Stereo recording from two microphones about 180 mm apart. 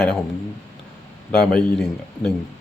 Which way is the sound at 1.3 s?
5° left (ahead or behind).